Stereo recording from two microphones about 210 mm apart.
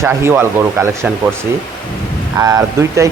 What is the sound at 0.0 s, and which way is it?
Speech, 10° right (ahead or behind).